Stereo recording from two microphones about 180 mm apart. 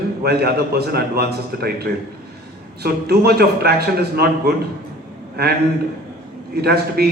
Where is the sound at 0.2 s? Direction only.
60° right (ahead or behind).